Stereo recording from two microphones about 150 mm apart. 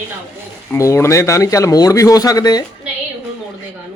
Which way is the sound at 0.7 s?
20° left (ahead or behind).